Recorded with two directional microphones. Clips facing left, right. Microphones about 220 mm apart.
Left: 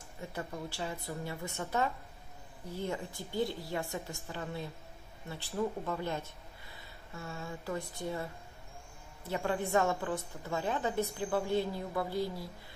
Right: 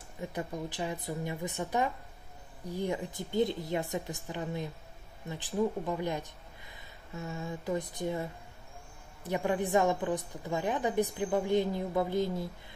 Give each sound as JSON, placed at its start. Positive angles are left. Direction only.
{"t": 0.2, "sound": "a woman's voice", "side_deg": -20}